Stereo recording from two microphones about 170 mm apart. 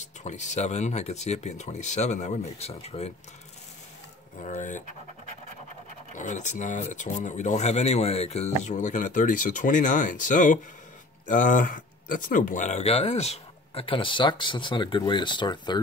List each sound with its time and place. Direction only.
0.0 s speech: 45° left (ahead or behind)
4.4 s speech: 45° left (ahead or behind)
6.1 s speech: 45° left (ahead or behind); by 15.8 s 25° left (ahead or behind)